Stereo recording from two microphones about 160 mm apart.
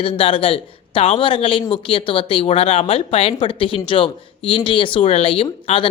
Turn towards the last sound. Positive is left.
turn(degrees=35)  # may be behind; listen again after turning